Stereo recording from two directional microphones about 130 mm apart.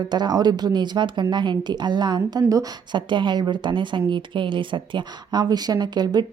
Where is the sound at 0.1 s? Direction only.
30° right (ahead or behind).